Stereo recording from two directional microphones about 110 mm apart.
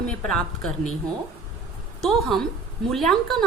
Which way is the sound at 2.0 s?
Centre (ahead or behind).